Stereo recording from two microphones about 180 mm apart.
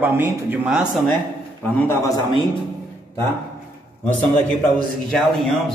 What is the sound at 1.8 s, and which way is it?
Speech, 15° left (ahead or behind).